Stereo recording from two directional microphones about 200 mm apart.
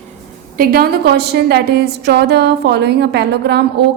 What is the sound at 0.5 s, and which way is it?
A woman's voice, 45° right (ahead or behind).